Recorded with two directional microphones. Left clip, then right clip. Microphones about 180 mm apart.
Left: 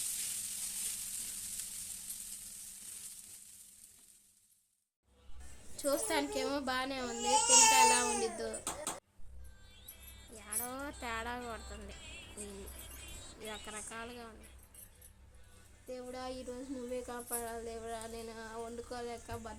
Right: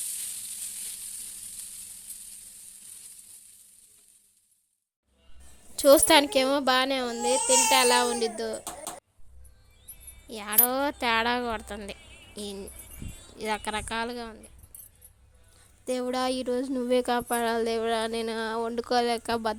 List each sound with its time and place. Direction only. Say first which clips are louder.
5.7 s a child's voice: right 16 dB; 50° right (ahead or behind)
10.2 s speech: right 16 dB; 60° right (ahead or behind)
13.4 s a child's voice: right 16 dB; 60° right (ahead or behind)
15.9 s speech: right 15 dB; 55° right (ahead or behind)